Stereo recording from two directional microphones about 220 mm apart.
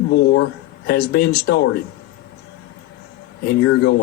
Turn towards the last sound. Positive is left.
turn(degrees=50)  # may be behind; listen again after turning